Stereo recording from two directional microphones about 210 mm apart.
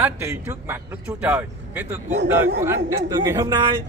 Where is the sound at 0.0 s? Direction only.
10° right (ahead or behind).